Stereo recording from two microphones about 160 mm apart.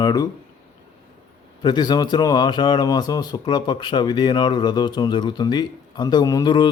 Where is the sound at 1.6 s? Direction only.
25° left (ahead or behind).